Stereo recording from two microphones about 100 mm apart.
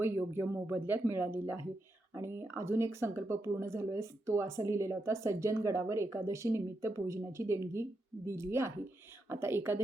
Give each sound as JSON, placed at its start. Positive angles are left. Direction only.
{"t": 0.0, "sound": "speech", "side_deg": -20}